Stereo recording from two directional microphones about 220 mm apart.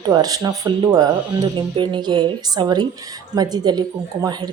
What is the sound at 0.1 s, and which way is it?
Speech, 15° right (ahead or behind).